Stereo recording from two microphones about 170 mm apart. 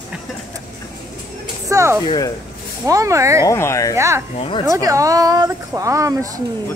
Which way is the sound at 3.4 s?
15° left (ahead or behind).